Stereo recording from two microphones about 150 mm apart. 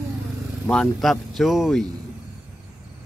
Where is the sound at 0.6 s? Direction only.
5° left (ahead or behind).